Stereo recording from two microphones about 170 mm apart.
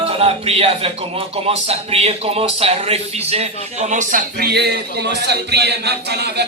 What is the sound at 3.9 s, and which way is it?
Speech, 50° right (ahead or behind).